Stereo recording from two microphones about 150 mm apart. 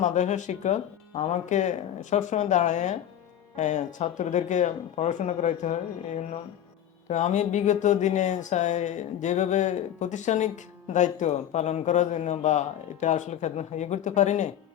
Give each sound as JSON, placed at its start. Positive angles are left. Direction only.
{"t": 0.0, "sound": "speech", "side_deg": 50}
{"t": 7.1, "sound": "speech", "side_deg": 50}